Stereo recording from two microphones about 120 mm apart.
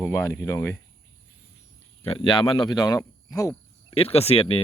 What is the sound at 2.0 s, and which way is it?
Speech, 45° left (ahead or behind).